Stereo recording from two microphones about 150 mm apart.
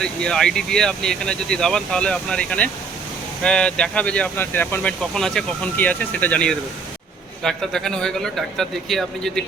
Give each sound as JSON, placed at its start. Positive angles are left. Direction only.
{"t": 0.0, "sound": "speech", "side_deg": 5}